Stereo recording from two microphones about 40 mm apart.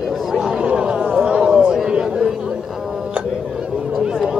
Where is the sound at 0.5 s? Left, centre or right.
Right.